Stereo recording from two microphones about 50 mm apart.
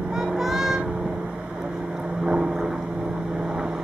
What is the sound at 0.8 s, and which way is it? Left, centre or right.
Vehicle, centre.